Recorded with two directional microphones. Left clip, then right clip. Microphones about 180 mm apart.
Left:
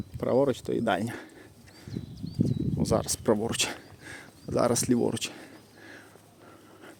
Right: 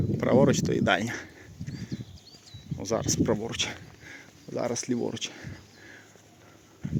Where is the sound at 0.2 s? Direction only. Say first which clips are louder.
Right 2 dB; centre (ahead or behind).